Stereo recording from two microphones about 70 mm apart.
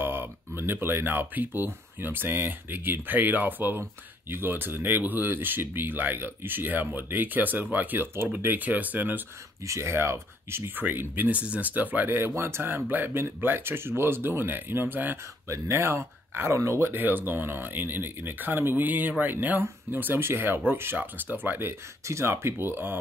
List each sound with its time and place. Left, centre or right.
0.0 s speech: right
9.7 s speech: right
10.8 s speech: right
15.4 s speech: right